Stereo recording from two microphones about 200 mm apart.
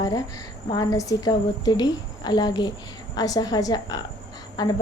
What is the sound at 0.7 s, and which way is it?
A woman's voice, 20° left (ahead or behind).